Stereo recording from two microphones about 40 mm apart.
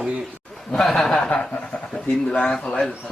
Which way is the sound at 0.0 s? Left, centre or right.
Centre.